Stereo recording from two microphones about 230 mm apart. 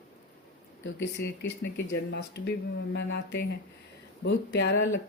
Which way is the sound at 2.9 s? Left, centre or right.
Left.